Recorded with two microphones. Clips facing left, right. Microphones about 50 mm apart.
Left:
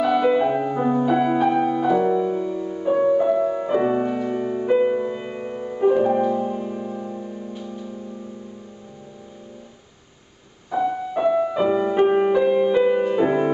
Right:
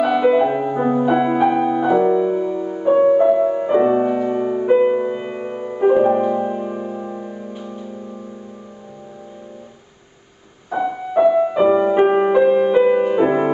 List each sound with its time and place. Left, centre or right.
0.0 s music: centre; by 7.4 s right
7.5 s music: centre
10.7 s music: centre